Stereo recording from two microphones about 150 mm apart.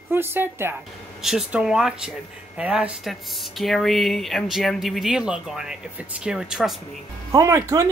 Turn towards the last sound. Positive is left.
turn(degrees=-20)  # may be behind; listen again after turning